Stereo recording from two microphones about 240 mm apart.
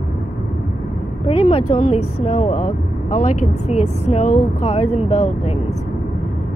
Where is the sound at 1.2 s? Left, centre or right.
Left.